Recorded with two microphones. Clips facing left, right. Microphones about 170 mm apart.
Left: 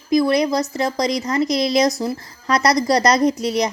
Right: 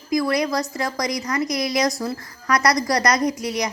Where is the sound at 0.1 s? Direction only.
25° left (ahead or behind).